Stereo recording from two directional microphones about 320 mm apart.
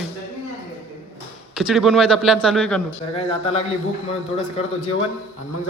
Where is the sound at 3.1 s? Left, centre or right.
Centre.